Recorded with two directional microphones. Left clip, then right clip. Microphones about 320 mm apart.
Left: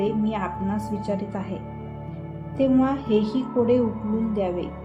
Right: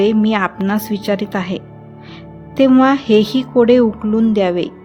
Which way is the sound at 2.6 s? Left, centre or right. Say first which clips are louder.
Right 10 dB; right.